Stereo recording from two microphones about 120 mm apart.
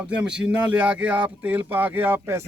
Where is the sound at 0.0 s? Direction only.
10° right (ahead or behind).